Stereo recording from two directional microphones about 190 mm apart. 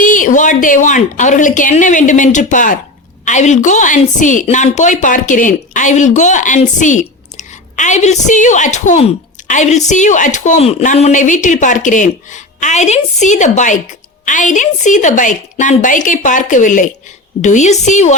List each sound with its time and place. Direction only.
0.0 s a woman's voice: 45° left (ahead or behind)